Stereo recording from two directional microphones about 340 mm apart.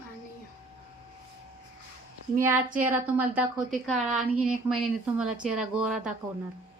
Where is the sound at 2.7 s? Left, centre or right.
Centre.